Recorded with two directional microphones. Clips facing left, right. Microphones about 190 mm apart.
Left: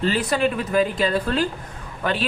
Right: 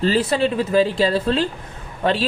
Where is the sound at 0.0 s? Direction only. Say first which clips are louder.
Right 3 dB; 30° right (ahead or behind).